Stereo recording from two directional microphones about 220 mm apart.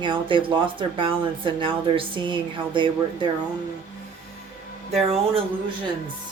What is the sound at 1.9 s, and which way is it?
Speech, 20° right (ahead or behind).